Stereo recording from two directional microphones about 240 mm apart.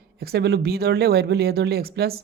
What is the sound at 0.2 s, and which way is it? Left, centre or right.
A woman's voice, right.